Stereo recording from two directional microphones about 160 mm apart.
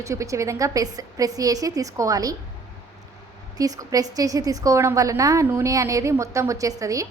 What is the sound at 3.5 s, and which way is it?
A woman's voice, 20° right (ahead or behind).